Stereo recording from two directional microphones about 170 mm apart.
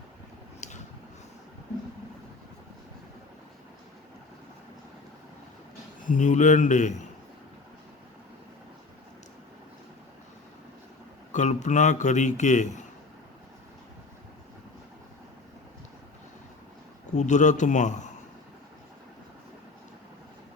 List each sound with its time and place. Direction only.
6.0 s a man's voice: 50° left (ahead or behind)
11.3 s a man's voice: 45° left (ahead or behind)
17.2 s a man's voice: 45° left (ahead or behind)